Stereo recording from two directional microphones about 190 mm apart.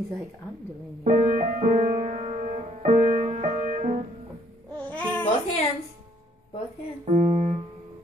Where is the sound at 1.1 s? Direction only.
45° right (ahead or behind).